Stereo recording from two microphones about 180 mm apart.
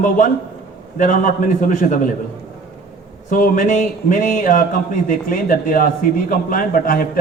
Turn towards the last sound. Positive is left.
turn(degrees=50)  # may be behind; listen again after turning